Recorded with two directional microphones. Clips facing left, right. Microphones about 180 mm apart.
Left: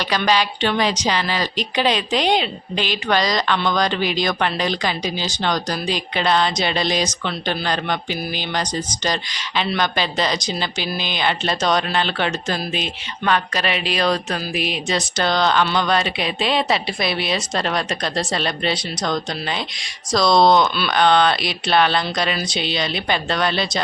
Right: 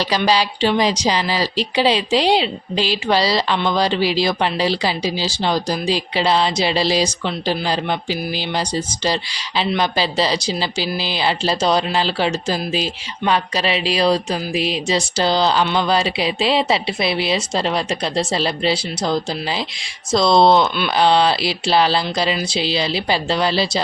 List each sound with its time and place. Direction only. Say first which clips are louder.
0.3 s a woman's voice: right 1 dB; 35° right (ahead or behind)
5.5 s speech: right 2 dB; 10° right (ahead or behind)
5.9 s a woman's voice: right 2 dB; 30° right (ahead or behind)
9.8 s speech: right 2 dB; 30° right (ahead or behind)
13.3 s a woman's voice: right 2 dB; 30° right (ahead or behind)
15.6 s speech: right 1 dB; 10° right (ahead or behind)
15.9 s a woman's voice: right 2 dB; 30° right (ahead or behind)